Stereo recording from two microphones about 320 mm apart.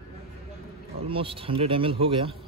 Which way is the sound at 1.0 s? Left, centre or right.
Centre.